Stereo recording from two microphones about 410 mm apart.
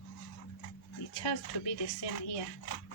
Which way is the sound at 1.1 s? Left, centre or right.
Left.